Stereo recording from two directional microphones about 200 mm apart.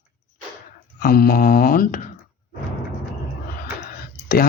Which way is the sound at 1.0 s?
45° left (ahead or behind).